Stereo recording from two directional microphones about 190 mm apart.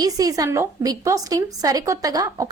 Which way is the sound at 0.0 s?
20° right (ahead or behind).